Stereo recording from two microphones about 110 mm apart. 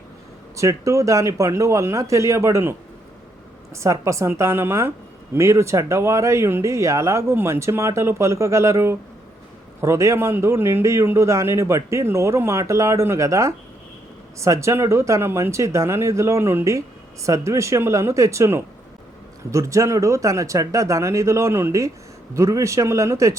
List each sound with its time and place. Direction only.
0.5 s a man's voice: 30° right (ahead or behind)
3.8 s a man's voice: 25° right (ahead or behind)